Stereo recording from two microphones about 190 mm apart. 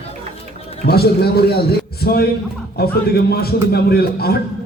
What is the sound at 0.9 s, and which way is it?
A man's voice, 55° left (ahead or behind).